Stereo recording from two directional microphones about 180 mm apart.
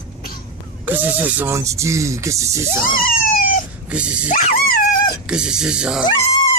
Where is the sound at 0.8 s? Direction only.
10° right (ahead or behind).